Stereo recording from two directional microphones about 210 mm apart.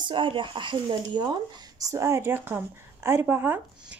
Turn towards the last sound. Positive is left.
turn(degrees=-10)  # may be behind; listen again after turning